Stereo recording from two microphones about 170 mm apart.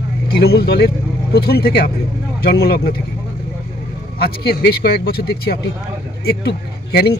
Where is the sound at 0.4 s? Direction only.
70° left (ahead or behind).